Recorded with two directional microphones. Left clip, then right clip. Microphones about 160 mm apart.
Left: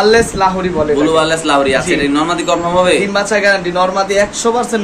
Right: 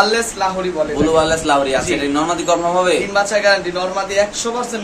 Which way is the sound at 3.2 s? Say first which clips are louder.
Left 2 dB; 55° left (ahead or behind).